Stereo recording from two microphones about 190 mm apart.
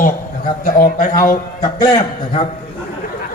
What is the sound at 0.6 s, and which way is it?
Speech, 45° left (ahead or behind).